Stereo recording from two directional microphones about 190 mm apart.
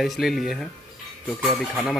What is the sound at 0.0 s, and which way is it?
A man's voice, centre (ahead or behind).